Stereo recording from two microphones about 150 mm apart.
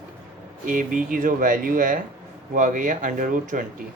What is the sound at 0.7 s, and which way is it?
Speech, 60° right (ahead or behind).